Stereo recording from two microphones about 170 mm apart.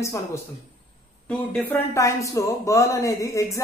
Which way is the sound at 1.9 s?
15° left (ahead or behind).